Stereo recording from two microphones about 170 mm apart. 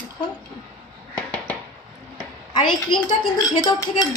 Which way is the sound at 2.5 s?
25° left (ahead or behind).